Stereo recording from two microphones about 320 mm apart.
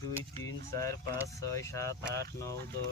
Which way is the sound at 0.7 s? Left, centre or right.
Centre.